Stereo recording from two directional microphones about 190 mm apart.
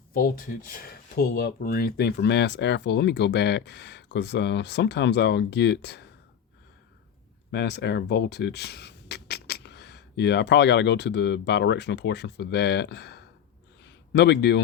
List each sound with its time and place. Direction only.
0.1 s speech: 50° left (ahead or behind)
7.5 s speech: 65° left (ahead or behind)
13.8 s a sound: 65° left (ahead or behind)